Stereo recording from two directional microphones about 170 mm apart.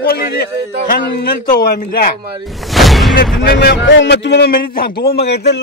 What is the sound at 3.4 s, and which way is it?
A man's voice, 75° left (ahead or behind).